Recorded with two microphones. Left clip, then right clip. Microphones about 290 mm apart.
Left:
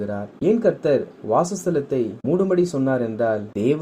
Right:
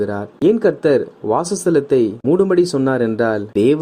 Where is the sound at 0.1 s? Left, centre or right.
Right.